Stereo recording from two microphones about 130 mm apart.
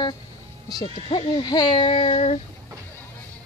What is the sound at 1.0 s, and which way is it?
Speech, 40° left (ahead or behind).